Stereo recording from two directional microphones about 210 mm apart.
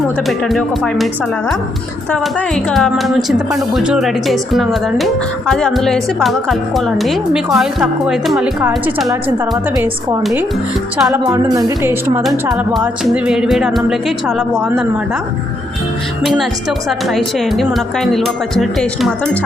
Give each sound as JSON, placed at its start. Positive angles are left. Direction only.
{"t": 0.3, "sound": "speech", "side_deg": 0}
{"t": 2.6, "sound": "speech", "side_deg": 0}
{"t": 9.7, "sound": "a woman's voice", "side_deg": -15}
{"t": 10.9, "sound": "a woman's voice", "side_deg": -5}
{"t": 12.2, "sound": "speech", "side_deg": 0}
{"t": 16.2, "sound": "speech", "side_deg": 0}